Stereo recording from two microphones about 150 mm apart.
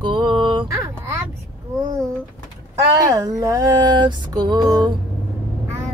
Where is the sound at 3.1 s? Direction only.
20° right (ahead or behind).